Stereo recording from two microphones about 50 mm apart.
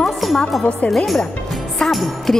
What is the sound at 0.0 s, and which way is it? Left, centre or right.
Music, centre.